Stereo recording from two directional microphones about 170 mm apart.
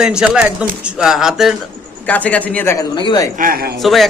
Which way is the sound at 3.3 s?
55° right (ahead or behind).